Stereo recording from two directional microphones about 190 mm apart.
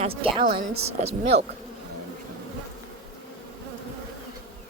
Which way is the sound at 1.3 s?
60° right (ahead or behind).